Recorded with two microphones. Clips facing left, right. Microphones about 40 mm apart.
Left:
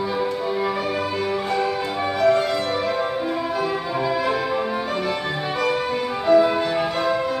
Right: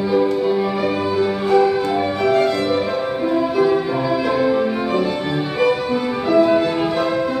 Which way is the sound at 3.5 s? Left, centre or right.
Centre.